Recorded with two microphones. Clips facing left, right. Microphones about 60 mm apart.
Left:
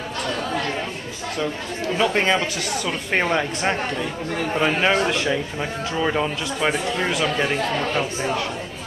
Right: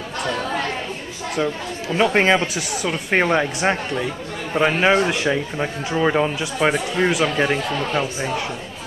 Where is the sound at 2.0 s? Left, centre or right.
Centre.